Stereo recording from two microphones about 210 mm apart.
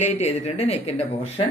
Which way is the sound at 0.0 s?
30° left (ahead or behind).